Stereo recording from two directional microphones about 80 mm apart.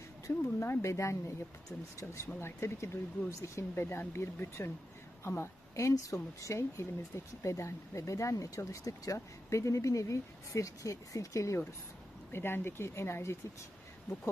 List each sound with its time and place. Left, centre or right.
0.3 s speech: left
12.3 s speech: left